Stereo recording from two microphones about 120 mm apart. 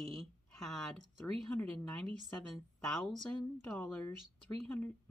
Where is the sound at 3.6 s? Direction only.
20° left (ahead or behind).